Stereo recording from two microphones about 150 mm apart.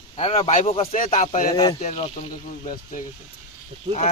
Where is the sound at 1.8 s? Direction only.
50° left (ahead or behind).